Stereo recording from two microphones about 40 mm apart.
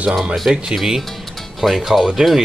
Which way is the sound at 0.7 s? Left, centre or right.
Centre.